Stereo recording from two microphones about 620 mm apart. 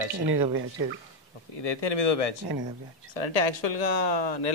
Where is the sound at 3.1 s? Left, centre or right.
Left.